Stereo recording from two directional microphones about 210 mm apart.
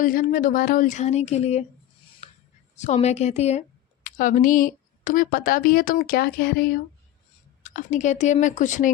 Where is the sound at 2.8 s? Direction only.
30° left (ahead or behind); by 6.8 s 45° left (ahead or behind).